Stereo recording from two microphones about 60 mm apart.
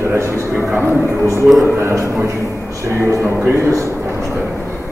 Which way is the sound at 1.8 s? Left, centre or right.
Right.